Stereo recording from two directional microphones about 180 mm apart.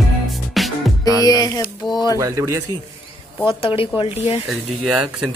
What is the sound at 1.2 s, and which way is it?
Music, 20° left (ahead or behind).